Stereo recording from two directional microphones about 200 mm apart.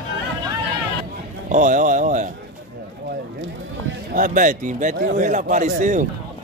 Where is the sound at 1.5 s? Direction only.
40° right (ahead or behind).